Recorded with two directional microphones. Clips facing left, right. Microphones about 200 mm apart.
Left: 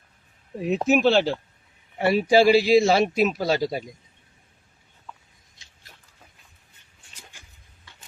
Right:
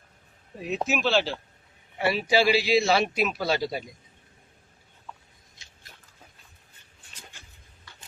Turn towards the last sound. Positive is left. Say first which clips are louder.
# even
turn(degrees=10)  # may be behind; listen again after turning